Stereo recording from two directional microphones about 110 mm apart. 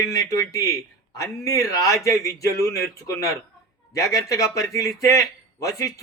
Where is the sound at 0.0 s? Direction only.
30° left (ahead or behind).